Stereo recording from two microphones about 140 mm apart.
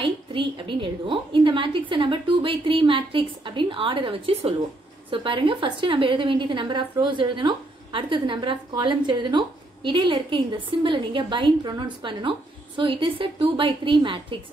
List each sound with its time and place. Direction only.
0.0 s a woman's voice: 35° right (ahead or behind)